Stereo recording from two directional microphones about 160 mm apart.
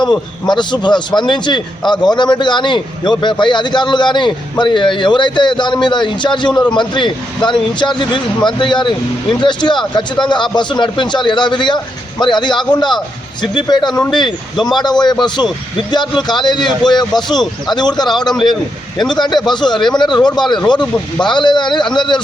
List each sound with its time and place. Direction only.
0.4 s a man's voice: 30° left (ahead or behind)